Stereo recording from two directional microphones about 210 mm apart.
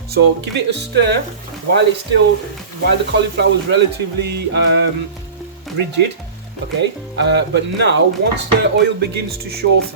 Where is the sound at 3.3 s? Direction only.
55° right (ahead or behind).